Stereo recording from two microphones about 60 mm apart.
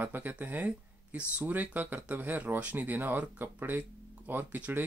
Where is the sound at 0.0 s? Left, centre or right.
Right.